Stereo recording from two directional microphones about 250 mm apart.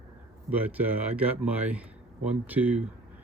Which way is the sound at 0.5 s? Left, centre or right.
Centre.